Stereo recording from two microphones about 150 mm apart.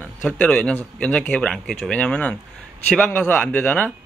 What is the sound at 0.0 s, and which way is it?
Speech, 10° left (ahead or behind).